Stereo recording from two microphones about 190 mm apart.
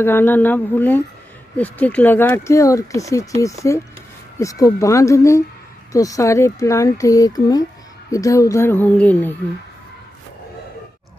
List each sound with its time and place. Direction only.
0.0 s speech: 10° left (ahead or behind)